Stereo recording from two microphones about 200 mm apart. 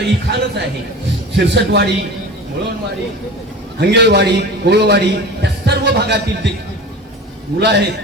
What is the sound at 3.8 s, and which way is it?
A man's voice, 55° right (ahead or behind).